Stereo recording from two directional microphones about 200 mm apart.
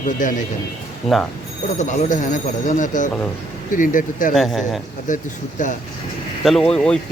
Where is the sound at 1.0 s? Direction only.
Centre (ahead or behind).